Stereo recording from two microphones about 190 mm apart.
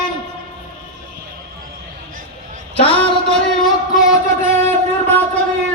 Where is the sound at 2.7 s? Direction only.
30° left (ahead or behind).